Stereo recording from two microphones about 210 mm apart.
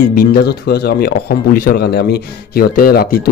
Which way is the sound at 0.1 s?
50° left (ahead or behind).